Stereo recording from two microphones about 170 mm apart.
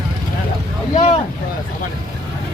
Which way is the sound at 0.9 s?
40° left (ahead or behind).